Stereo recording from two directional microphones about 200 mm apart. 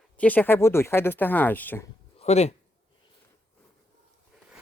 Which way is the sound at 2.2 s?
35° left (ahead or behind).